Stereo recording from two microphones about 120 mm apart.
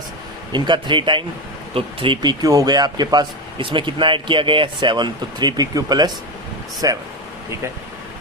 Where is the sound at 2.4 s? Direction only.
30° right (ahead or behind).